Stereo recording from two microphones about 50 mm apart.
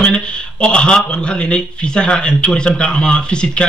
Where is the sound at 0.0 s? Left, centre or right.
Centre.